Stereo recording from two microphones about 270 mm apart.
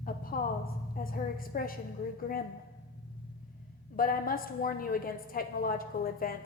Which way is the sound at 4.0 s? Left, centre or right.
Left.